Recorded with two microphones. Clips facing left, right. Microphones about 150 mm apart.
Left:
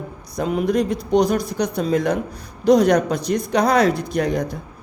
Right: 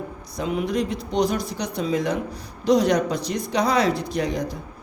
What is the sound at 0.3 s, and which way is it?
Speech, 45° left (ahead or behind).